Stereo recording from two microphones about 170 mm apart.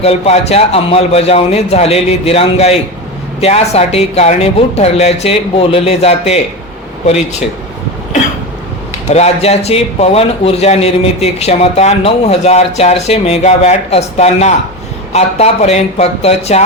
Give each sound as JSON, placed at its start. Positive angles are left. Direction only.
{"t": 0.0, "sound": "a man's voice", "side_deg": 40}
{"t": 9.0, "sound": "a man's voice", "side_deg": 40}